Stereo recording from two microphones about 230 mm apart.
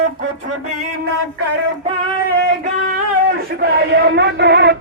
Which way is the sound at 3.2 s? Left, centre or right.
Right.